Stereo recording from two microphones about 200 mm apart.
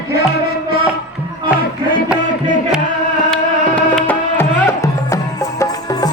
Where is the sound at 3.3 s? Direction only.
5° left (ahead or behind).